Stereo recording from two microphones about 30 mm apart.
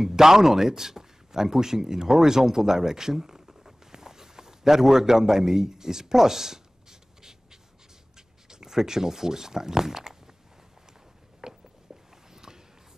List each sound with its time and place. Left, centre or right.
0.0 s a man's voice: centre
8.5 s speech: centre
11.4 s a sound: centre